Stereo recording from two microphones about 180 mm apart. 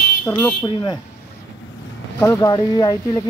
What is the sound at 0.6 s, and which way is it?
Speech, 25° left (ahead or behind).